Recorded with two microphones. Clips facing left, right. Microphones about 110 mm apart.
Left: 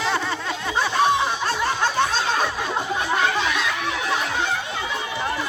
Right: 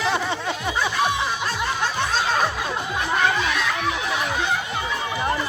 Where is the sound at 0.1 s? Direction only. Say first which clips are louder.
Right 1 dB; 20° right (ahead or behind).